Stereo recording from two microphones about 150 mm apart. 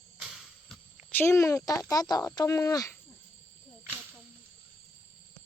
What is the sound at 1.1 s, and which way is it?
Speech, 15° left (ahead or behind).